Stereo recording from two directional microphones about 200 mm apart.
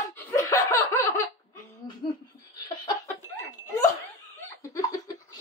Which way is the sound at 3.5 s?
15° left (ahead or behind).